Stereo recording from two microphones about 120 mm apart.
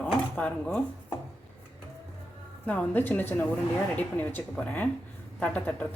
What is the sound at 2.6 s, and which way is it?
Speech, 10° left (ahead or behind).